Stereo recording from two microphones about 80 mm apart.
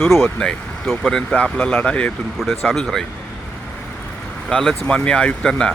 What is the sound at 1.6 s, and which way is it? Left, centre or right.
Speech, left.